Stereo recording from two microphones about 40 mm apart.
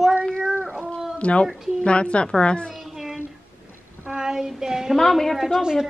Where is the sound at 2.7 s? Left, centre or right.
Centre.